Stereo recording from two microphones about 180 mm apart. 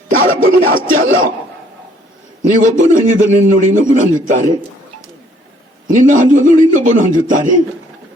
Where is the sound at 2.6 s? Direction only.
45° right (ahead or behind).